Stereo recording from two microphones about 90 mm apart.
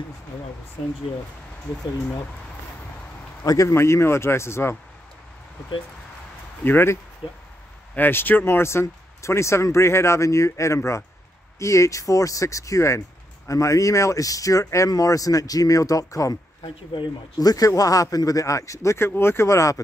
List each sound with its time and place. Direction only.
3.4 s a man's voice: 35° left (ahead or behind)
6.6 s a man's voice: 25° left (ahead or behind)
7.2 s speech: 75° left (ahead or behind)
7.9 s speech: 20° left (ahead or behind); by 16.3 s 40° left (ahead or behind)
16.6 s speech: 65° left (ahead or behind)
17.4 s speech: 45° left (ahead or behind)